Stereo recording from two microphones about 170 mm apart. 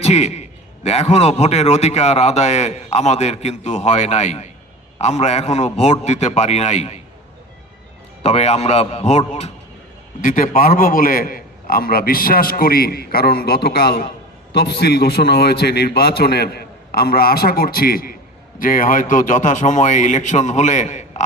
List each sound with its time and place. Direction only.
0.0 s a man's voice: 40° left (ahead or behind)
8.2 s speech: 40° left (ahead or behind)
10.2 s a man's voice: 50° left (ahead or behind)